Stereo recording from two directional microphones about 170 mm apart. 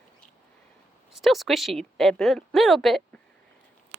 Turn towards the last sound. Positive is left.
turn(degrees=0)  # may be behind; listen again after turning